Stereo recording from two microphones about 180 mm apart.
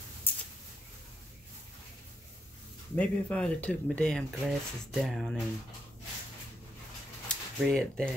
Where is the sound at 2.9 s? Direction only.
5° left (ahead or behind).